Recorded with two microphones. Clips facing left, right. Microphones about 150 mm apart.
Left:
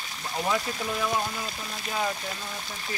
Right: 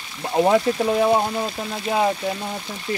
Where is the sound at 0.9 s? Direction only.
45° right (ahead or behind).